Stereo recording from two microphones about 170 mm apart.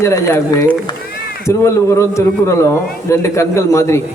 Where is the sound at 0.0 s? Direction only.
15° left (ahead or behind).